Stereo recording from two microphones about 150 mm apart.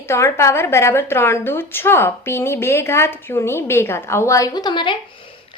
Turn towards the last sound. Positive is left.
turn(degrees=30)  # may be behind; listen again after turning